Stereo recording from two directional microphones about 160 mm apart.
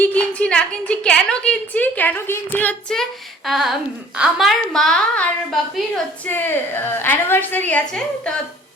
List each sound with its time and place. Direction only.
0.0 s a woman's voice: 10° left (ahead or behind)